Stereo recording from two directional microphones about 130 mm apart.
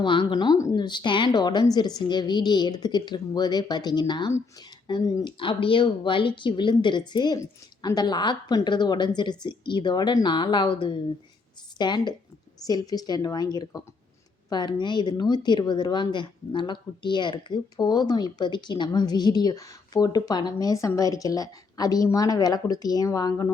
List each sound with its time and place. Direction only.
0.0 s speech: 40° left (ahead or behind)